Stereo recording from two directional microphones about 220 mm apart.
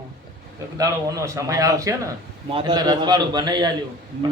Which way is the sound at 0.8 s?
15° right (ahead or behind).